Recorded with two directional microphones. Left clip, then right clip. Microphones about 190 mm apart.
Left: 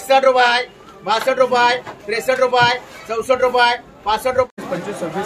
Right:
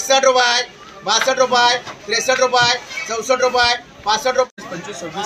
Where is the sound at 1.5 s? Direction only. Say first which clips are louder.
Even; 35° left (ahead or behind).